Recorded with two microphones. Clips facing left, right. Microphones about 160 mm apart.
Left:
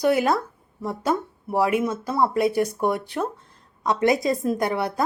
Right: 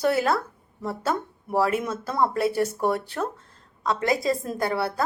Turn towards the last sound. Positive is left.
turn(degrees=15)  # may be behind; listen again after turning